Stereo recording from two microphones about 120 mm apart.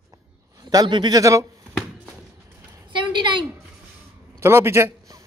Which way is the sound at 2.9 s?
40° right (ahead or behind).